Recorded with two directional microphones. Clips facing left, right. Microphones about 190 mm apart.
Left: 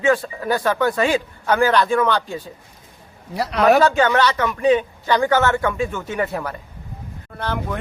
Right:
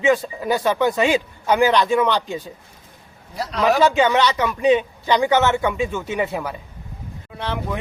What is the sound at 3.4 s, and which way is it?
Speech, 65° left (ahead or behind).